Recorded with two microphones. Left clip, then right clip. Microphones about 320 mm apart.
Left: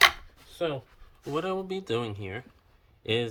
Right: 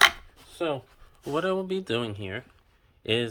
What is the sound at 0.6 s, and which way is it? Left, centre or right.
Speech, centre.